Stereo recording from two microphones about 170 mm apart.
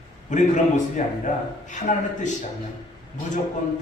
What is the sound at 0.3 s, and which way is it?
A man's voice, 45° left (ahead or behind).